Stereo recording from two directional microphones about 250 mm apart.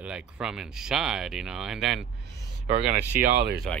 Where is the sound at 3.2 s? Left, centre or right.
Right.